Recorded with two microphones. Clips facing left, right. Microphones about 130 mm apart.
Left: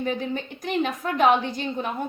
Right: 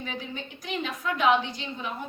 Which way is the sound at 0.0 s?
50° left (ahead or behind).